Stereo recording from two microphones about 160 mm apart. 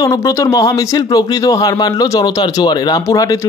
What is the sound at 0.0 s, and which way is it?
Speech, 20° left (ahead or behind).